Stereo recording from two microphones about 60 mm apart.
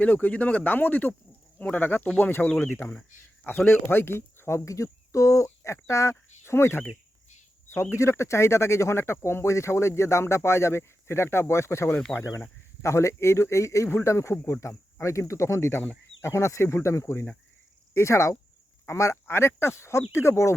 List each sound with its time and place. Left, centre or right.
0.0 s speech: left
12.1 s speech: centre
12.8 s speech: left
19.1 s speech: left